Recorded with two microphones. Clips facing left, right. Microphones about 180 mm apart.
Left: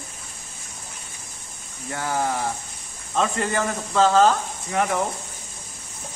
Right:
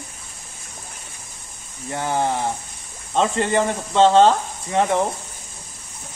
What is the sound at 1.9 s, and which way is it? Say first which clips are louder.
Speech: right 3 dB; 25° right (ahead or behind).